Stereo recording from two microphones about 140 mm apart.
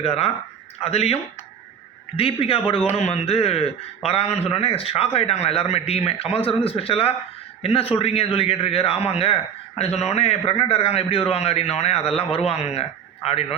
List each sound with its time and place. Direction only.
0.0 s a man's voice: 45° left (ahead or behind)